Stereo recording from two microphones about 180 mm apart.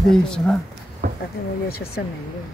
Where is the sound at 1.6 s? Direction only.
60° left (ahead or behind).